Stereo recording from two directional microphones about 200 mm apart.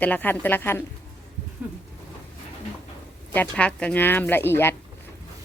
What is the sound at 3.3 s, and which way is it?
Speech, 5° left (ahead or behind).